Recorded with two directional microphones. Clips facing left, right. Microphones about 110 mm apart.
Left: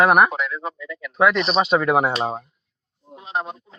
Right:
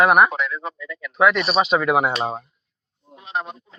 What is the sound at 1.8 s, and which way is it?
Speech, 35° left (ahead or behind).